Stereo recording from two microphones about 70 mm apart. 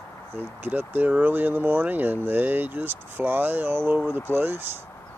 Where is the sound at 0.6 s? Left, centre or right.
Right.